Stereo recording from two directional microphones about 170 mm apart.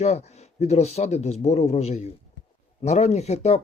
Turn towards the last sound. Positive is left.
turn(degrees=40)  # may be behind; listen again after turning